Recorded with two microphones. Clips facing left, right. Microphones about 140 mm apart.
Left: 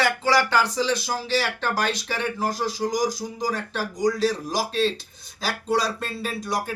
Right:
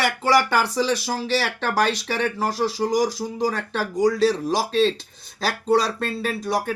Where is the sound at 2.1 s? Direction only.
55° right (ahead or behind).